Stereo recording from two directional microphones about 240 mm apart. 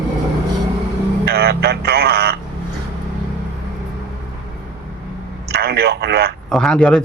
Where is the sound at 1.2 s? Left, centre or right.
Right.